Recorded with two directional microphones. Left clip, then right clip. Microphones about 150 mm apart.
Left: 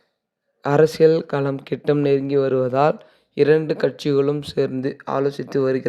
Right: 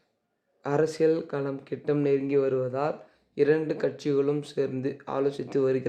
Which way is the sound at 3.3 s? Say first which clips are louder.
Left 7 dB; 50° left (ahead or behind).